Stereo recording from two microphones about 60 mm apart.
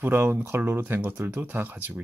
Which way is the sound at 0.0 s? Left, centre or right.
Right.